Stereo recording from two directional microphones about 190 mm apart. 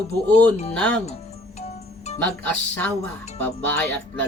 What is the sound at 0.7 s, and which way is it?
Speech, 5° left (ahead or behind).